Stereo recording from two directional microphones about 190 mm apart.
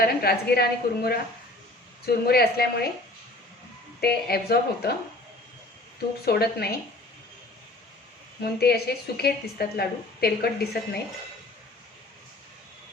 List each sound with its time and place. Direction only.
0.0 s a woman's voice: 55° left (ahead or behind)
4.0 s a woman's voice: 55° left (ahead or behind)
6.2 s a woman's voice: 55° left (ahead or behind)
8.4 s a woman's voice: 55° left (ahead or behind)